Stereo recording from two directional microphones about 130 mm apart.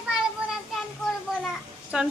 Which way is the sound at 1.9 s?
5° right (ahead or behind).